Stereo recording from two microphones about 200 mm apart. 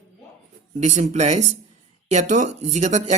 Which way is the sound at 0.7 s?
35° right (ahead or behind).